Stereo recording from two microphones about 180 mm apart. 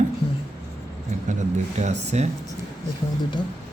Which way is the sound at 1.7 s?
40° right (ahead or behind).